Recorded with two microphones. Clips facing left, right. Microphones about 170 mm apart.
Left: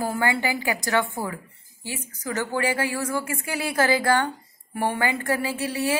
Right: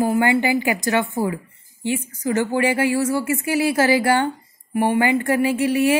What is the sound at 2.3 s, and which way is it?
Speech, 15° right (ahead or behind).